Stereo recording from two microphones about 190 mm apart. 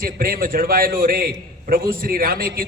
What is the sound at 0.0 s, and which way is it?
A man's voice, 50° right (ahead or behind).